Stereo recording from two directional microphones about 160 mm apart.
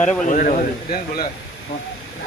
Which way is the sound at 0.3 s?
60° left (ahead or behind).